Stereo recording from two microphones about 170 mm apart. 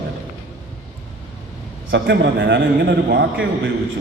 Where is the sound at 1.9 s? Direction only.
80° right; by 3.7 s 65° right (ahead or behind).